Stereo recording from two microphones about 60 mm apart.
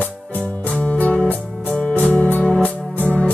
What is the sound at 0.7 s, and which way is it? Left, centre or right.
Music, left.